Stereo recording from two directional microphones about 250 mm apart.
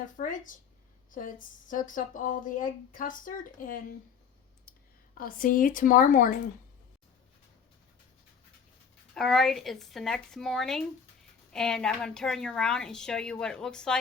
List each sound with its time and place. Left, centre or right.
0.2 s speech: left
4.7 s clicking: left
5.1 s speech: left
9.1 s a woman's voice: centre